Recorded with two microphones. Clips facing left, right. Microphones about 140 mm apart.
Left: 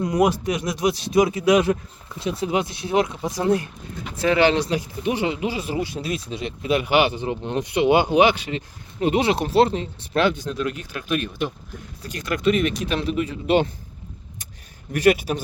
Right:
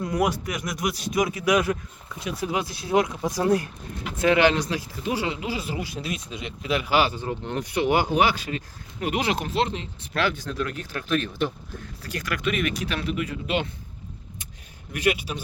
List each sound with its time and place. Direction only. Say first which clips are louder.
0.0 s speech: left 5 dB; 20° left (ahead or behind); by 9.8 s 35° left (ahead or behind)
10.2 s speech: left 5 dB; 20° left (ahead or behind)
14.9 s speech: left 7 dB; 45° left (ahead or behind)